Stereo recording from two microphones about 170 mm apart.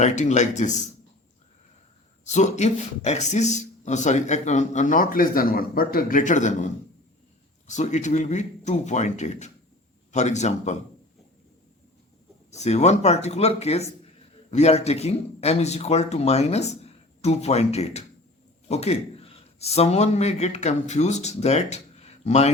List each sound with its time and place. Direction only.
0.0 s a man's voice: 40° left (ahead or behind)
2.2 s a man's voice: 45° left (ahead or behind)
7.7 s a man's voice: 45° left (ahead or behind)
12.5 s a man's voice: 40° left (ahead or behind)